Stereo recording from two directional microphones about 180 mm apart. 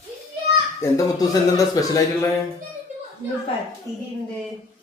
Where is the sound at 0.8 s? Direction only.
15° left (ahead or behind).